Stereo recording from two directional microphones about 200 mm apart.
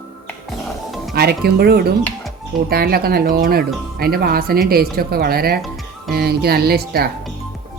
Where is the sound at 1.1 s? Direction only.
50° right (ahead or behind).